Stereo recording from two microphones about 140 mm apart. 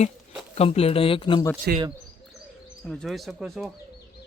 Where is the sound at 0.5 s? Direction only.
45° left (ahead or behind).